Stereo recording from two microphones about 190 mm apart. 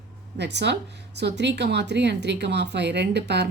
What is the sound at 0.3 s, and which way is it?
Speech, 65° right (ahead or behind).